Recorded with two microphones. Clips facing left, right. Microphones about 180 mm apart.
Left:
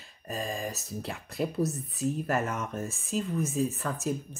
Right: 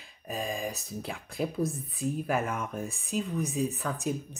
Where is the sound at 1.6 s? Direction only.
55° right (ahead or behind).